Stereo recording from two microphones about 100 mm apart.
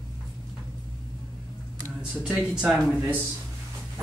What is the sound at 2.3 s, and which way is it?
Speech, 5° right (ahead or behind).